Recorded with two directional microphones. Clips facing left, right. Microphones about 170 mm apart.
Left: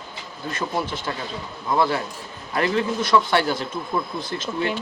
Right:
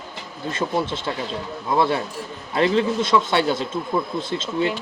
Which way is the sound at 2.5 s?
25° right (ahead or behind).